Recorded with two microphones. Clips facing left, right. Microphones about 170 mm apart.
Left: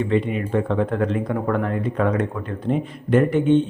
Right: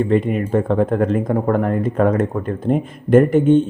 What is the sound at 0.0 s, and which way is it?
Speech, 45° right (ahead or behind).